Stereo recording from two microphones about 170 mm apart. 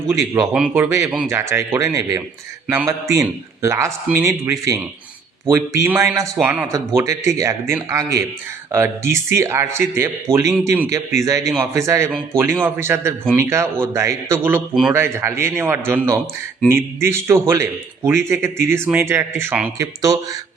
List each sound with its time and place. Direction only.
0.5 s speech: 10° right (ahead or behind)